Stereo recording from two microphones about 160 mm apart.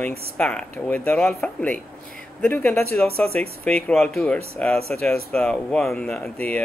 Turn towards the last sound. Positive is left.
turn(degrees=5)  # may be behind; listen again after turning